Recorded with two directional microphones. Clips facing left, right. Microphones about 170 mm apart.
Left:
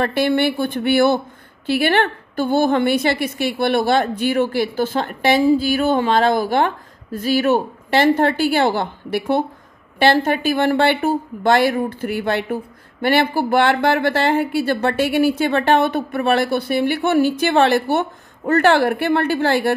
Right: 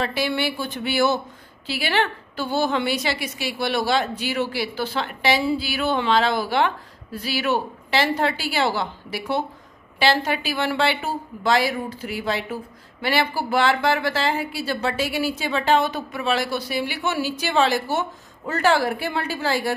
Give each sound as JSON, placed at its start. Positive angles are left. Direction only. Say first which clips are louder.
{"t": 0.0, "sound": "a woman's voice", "louder": "left 7 dB", "side_deg": 55}